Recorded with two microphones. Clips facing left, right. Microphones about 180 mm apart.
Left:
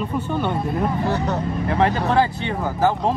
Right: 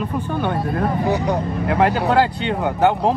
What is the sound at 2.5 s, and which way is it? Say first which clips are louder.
Speech: right 3 dB; 70° right (ahead or behind).